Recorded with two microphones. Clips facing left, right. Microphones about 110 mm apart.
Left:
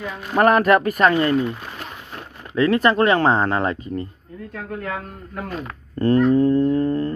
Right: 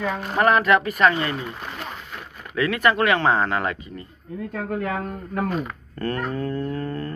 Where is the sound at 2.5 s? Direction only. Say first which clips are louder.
Left 4 dB; 35° left (ahead or behind).